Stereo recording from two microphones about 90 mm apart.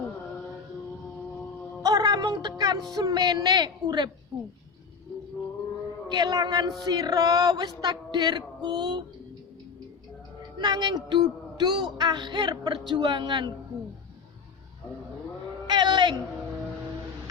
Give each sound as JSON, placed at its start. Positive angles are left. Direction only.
{"t": 1.8, "sound": "music", "side_deg": -45}
{"t": 2.9, "sound": "speech", "side_deg": -45}
{"t": 6.1, "sound": "speech", "side_deg": -45}
{"t": 10.6, "sound": "speech", "side_deg": -55}
{"t": 15.6, "sound": "a sound", "side_deg": -55}